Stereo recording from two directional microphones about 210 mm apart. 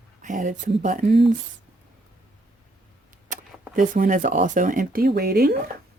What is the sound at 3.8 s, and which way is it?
Speech, 40° right (ahead or behind).